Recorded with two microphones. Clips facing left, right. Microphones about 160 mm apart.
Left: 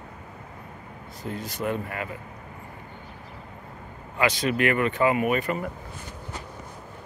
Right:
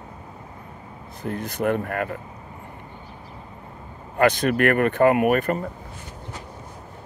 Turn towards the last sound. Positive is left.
turn(degrees=-50)  # may be behind; listen again after turning